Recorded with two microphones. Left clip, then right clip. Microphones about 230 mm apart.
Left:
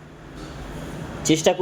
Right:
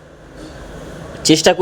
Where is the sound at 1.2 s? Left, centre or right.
Centre.